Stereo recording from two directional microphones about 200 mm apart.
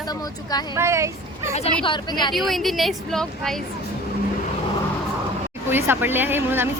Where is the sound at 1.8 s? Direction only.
20° left (ahead or behind).